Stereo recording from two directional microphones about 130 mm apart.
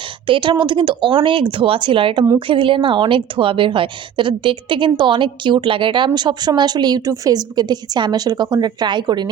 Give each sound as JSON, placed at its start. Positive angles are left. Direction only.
{"t": 0.3, "sound": "a woman's voice", "side_deg": -40}